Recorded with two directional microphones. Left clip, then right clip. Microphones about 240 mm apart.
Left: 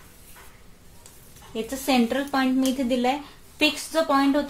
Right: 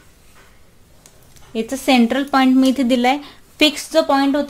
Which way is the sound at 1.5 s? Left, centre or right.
Right.